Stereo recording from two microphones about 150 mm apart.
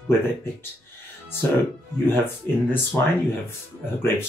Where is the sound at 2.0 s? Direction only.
15° left (ahead or behind).